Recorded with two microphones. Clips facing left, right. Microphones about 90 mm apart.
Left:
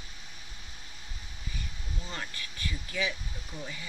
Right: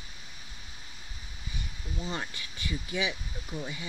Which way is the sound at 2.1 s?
20° right (ahead or behind).